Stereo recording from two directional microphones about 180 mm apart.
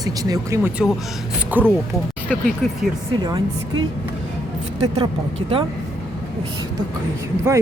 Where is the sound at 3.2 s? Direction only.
25° right (ahead or behind).